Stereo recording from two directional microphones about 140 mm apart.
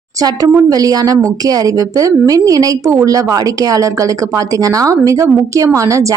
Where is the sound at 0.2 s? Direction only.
25° right (ahead or behind).